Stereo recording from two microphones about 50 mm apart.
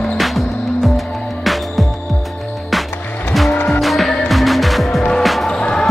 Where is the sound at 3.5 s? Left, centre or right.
Left.